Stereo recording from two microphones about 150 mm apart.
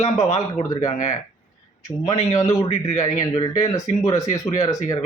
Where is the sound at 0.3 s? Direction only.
20° left (ahead or behind).